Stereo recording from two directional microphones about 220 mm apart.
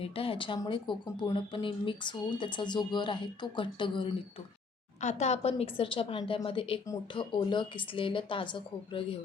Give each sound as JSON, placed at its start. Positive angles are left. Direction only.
{"t": 0.0, "sound": "speech", "side_deg": 25}